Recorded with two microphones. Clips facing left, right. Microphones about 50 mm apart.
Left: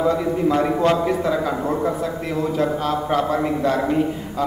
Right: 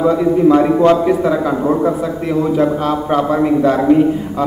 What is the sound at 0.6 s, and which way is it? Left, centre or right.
Speech, centre.